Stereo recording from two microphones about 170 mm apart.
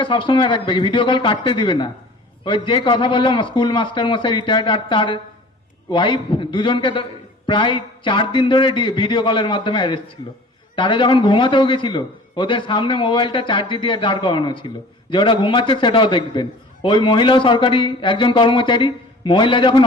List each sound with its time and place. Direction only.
0.0 s a man's voice: 30° left (ahead or behind)